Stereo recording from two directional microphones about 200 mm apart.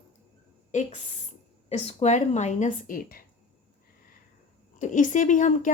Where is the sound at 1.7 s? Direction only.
30° left (ahead or behind).